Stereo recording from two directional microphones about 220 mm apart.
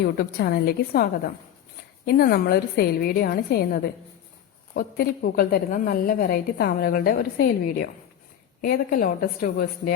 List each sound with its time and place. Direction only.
0.0 s a woman's voice: 50° left (ahead or behind)
2.0 s a woman's voice: 45° left (ahead or behind)